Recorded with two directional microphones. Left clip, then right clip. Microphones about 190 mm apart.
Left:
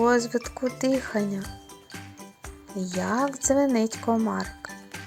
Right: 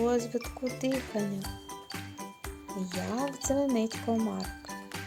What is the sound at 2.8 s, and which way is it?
Speech, 15° left (ahead or behind).